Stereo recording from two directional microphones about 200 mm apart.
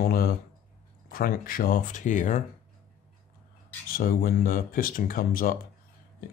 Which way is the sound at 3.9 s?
45° left (ahead or behind).